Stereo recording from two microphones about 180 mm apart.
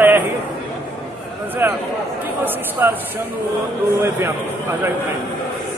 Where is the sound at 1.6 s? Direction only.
10° right (ahead or behind).